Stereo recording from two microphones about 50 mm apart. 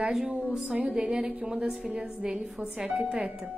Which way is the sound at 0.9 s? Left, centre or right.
Centre.